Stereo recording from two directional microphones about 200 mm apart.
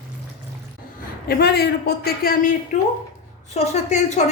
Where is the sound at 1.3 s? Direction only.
55° left (ahead or behind).